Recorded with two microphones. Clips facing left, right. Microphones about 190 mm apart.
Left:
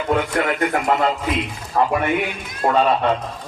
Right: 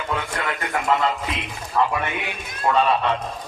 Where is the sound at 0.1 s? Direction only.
45° left (ahead or behind).